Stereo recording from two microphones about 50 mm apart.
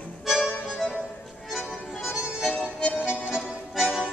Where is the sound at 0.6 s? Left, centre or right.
Centre.